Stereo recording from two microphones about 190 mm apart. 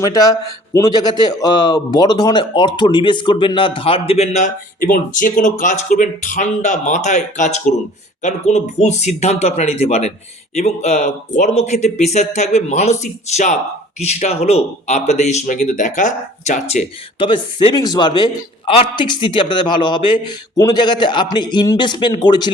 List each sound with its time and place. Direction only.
0.0 s a man's voice: 20° left (ahead or behind)